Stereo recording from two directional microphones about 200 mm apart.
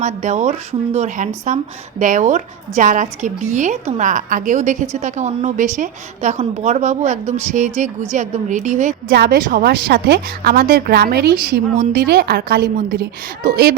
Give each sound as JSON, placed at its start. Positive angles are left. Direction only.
{"t": 0.0, "sound": "a woman's voice", "side_deg": -35}
{"t": 9.0, "sound": "a woman's voice", "side_deg": -55}